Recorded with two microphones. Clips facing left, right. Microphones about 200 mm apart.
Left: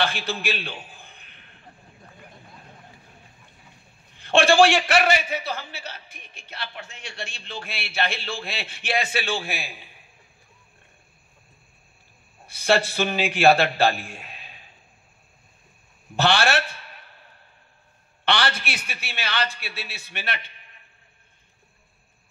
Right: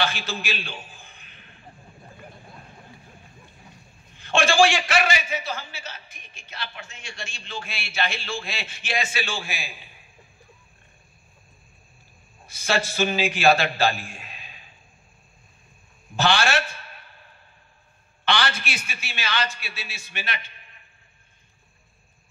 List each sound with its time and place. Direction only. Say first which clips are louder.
0.0 s a man's voice: left 2 dB; 60° left (ahead or behind)
4.2 s a man's voice: left 3 dB; 60° left (ahead or behind)
12.4 s a man's voice: left 4 dB; 60° left (ahead or behind)
16.2 s a man's voice: left 1 dB; 60° left (ahead or behind)
18.2 s a man's voice: left 1 dB; 60° left (ahead or behind)